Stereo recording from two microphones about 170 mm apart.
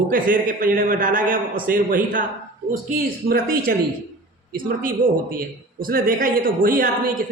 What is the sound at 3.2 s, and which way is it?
A man's voice, 60° right (ahead or behind).